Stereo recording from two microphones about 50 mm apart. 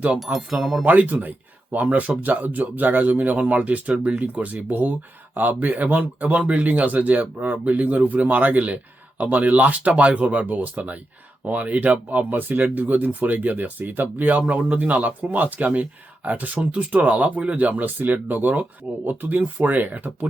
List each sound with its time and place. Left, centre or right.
0.3 s speech: centre
0.9 s speech: right